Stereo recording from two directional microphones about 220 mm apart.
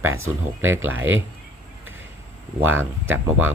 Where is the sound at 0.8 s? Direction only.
65° right (ahead or behind).